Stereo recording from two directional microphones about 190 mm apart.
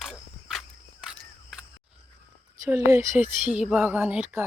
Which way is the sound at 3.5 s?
5° right (ahead or behind).